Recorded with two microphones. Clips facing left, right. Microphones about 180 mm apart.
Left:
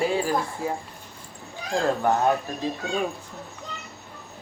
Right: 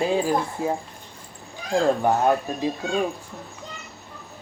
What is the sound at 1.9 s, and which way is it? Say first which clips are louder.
Speech: right 1 dB; 15° right (ahead or behind).